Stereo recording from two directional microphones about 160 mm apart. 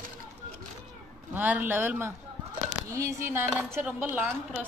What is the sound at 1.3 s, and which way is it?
A woman's voice, 10° right (ahead or behind).